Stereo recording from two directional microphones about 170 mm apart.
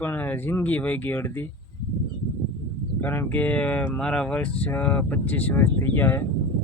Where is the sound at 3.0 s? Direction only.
10° left (ahead or behind).